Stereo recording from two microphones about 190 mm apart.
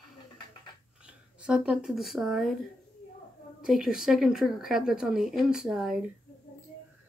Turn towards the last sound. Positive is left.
turn(degrees=-5)  # may be behind; listen again after turning